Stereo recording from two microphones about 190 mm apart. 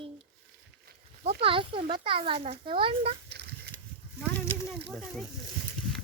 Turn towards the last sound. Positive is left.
turn(degrees=0)  # may be behind; listen again after turning